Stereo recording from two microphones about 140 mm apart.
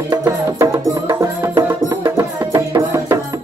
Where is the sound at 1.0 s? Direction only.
25° right (ahead or behind).